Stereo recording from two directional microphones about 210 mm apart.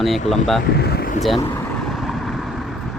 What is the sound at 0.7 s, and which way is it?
Speech, 50° left (ahead or behind).